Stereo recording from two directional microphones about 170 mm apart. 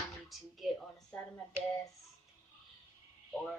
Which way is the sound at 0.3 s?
Centre (ahead or behind).